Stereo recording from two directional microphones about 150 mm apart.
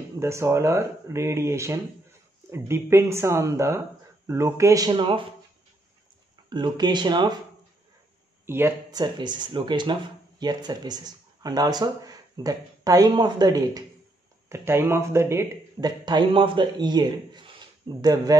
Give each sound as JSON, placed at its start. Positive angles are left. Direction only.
{"t": 0.2, "sound": "speech", "side_deg": -20}
{"t": 4.9, "sound": "speech", "side_deg": -35}
{"t": 6.5, "sound": "speech", "side_deg": -30}
{"t": 8.5, "sound": "speech", "side_deg": -15}
{"t": 8.9, "sound": "speech", "side_deg": -30}
{"t": 16.1, "sound": "a man's voice", "side_deg": -35}